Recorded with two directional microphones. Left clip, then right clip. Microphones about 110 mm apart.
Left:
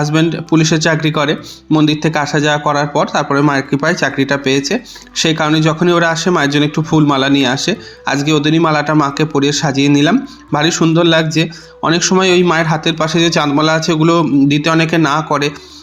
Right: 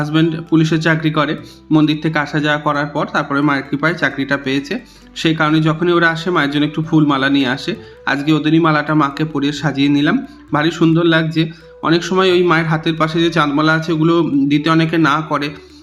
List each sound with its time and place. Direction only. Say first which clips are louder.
0.0 s speech: left 2 dB; 30° left (ahead or behind)